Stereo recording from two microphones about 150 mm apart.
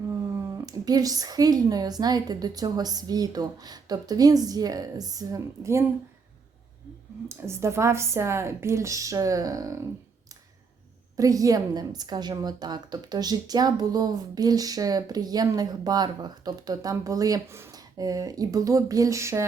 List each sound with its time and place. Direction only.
0.6 s a woman's voice: 25° right (ahead or behind)
7.3 s a woman's voice: 20° right (ahead or behind)
11.2 s a woman's voice: 25° right (ahead or behind)